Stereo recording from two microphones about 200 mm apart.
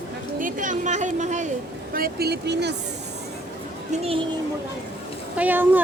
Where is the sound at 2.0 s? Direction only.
50° right (ahead or behind).